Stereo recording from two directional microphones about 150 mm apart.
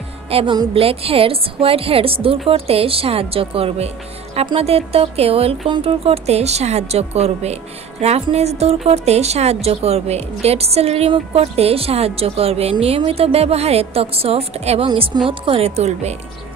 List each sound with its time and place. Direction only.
0.3 s a woman's voice: 40° right (ahead or behind)
14.9 s a woman's voice: 35° right (ahead or behind)